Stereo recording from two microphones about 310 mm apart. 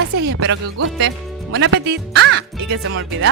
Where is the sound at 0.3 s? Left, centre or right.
Right.